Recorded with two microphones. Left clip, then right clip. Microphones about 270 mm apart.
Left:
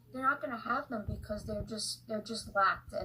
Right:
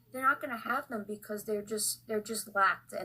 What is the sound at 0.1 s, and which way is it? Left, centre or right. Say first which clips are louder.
Speech: right 3 dB; right.